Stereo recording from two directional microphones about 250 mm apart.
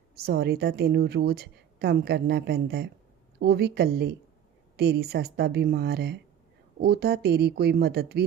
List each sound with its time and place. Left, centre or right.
0.3 s a woman's voice: right